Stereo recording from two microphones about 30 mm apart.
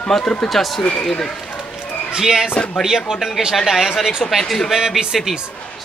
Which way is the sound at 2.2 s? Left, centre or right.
Centre.